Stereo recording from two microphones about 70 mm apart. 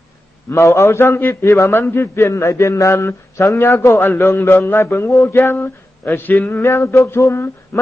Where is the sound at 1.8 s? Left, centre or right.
Left.